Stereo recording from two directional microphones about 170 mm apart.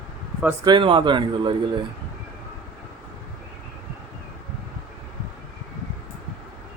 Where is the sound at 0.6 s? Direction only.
25° right (ahead or behind).